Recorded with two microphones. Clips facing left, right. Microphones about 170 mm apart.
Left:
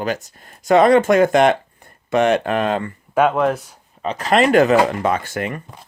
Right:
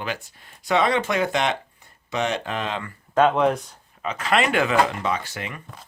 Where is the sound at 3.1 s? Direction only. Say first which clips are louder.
Left 2 dB; 5° left (ahead or behind).